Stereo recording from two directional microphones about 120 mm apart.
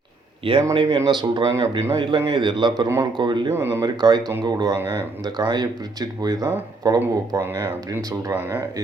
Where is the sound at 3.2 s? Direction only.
40° right (ahead or behind).